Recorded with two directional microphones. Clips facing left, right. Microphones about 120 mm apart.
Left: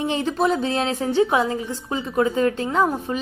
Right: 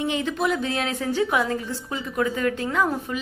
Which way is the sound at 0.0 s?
35° left (ahead or behind).